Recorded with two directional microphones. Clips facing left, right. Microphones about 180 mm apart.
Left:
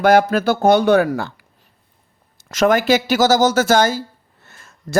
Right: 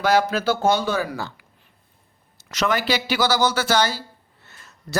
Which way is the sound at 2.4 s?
45° left (ahead or behind).